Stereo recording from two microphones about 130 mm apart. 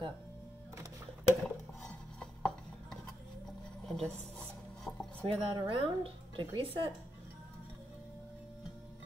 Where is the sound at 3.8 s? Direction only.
Centre (ahead or behind).